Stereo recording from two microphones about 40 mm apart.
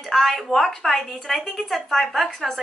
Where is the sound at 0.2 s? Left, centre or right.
Centre.